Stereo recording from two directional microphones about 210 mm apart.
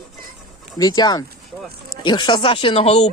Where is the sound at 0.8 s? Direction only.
20° left (ahead or behind).